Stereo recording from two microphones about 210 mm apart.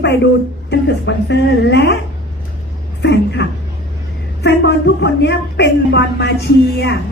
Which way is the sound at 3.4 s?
55° left (ahead or behind).